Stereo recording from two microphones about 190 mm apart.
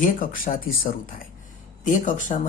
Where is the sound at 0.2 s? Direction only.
45° left (ahead or behind).